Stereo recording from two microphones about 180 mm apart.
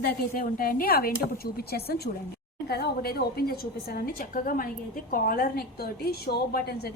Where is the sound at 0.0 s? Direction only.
55° left (ahead or behind).